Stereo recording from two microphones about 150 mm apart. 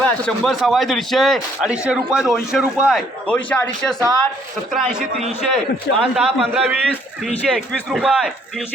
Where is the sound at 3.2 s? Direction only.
10° left (ahead or behind).